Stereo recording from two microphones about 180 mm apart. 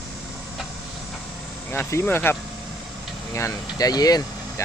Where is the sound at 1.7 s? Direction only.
10° left (ahead or behind).